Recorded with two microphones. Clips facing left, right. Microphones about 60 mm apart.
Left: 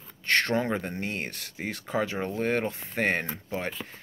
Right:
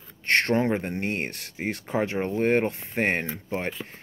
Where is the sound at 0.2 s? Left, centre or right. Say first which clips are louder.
Right 3 dB; right.